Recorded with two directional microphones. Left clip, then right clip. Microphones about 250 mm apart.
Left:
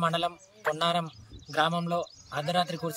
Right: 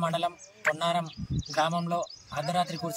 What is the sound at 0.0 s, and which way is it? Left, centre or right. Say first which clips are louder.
A man's voice: left 1 dB; centre.